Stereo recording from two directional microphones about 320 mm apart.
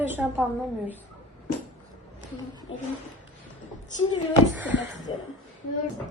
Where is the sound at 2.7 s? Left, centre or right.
Centre.